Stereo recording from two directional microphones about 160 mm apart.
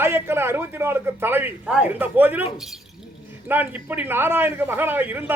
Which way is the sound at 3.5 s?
10° right (ahead or behind).